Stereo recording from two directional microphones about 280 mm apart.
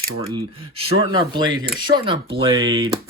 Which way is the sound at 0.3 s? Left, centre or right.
Centre.